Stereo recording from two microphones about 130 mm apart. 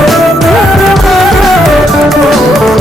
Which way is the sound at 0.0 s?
Centre (ahead or behind).